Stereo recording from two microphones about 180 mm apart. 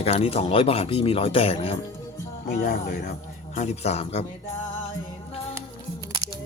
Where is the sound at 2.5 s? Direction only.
45° left (ahead or behind).